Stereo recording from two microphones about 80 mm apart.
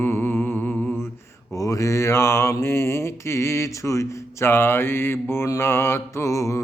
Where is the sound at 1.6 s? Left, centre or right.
Left.